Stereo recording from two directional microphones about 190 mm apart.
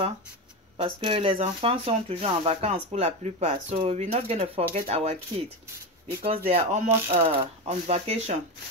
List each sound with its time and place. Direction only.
0.7 s speech: 25° right (ahead or behind)
6.2 s speech: 30° right (ahead or behind)